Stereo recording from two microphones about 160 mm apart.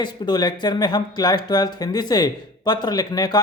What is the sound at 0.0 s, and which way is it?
Speech, 25° left (ahead or behind).